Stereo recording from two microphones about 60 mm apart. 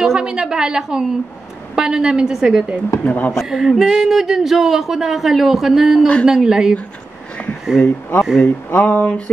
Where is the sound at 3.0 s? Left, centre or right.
Left.